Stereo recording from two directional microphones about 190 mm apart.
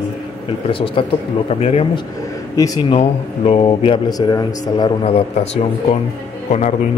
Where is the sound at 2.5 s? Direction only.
20° left (ahead or behind).